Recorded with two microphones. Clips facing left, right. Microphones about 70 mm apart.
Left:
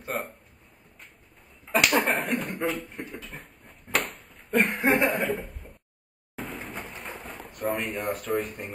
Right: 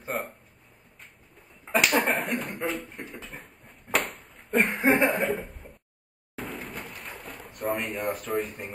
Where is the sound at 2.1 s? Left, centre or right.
Centre.